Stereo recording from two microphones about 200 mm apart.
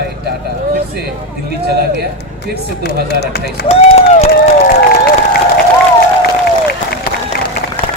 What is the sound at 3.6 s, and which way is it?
Speech, 30° left (ahead or behind).